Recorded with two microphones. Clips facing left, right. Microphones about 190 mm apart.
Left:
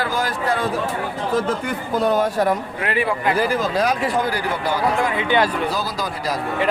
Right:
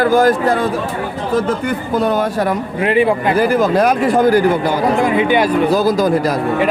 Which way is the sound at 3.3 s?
55° right (ahead or behind).